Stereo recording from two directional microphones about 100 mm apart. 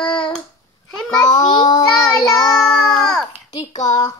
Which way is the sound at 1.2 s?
45° left (ahead or behind).